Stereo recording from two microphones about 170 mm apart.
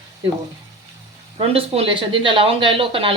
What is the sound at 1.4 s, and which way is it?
Speech, 35° right (ahead or behind).